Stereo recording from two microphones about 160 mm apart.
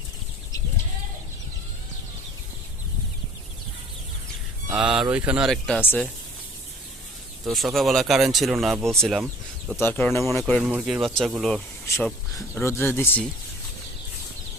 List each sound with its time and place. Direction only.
4.7 s speech: 5° right (ahead or behind)
7.4 s speech: centre (ahead or behind)
9.8 s speech: 15° left (ahead or behind)
10.4 s speech: 5° right (ahead or behind)
11.9 s speech: 15° left (ahead or behind)